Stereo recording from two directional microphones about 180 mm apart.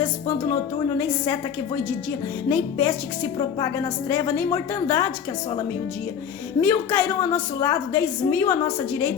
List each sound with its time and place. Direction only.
1.2 s a woman's voice: 20° left (ahead or behind)
2.5 s a woman's voice: 10° left (ahead or behind)
4.5 s a woman's voice: 15° left (ahead or behind)
6.6 s a woman's voice: 10° left (ahead or behind)
7.6 s a woman's voice: 20° left (ahead or behind)
8.0 s a woman's voice: 10° left (ahead or behind)